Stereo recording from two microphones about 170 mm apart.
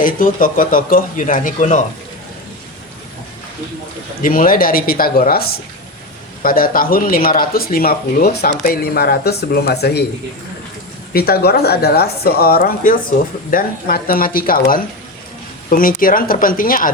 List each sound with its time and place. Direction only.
0.0 s speech: 55° left (ahead or behind)
4.2 s speech: 55° left (ahead or behind); by 10.0 s 70° left (ahead or behind)
11.1 s speech: 65° left (ahead or behind)